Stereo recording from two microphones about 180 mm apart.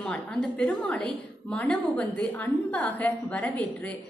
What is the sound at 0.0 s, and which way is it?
A woman's voice, 5° left (ahead or behind).